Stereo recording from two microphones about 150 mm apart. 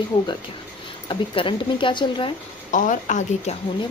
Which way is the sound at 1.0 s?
35° left (ahead or behind).